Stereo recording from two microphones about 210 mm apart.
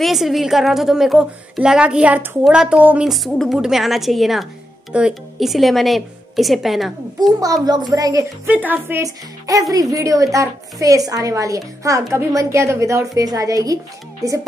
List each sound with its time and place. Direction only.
0.0 s a woman's voice: centre (ahead or behind)
7.3 s a woman's voice: 15° right (ahead or behind)